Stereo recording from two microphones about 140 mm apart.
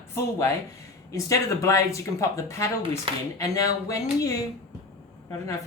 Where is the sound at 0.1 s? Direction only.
20° left (ahead or behind).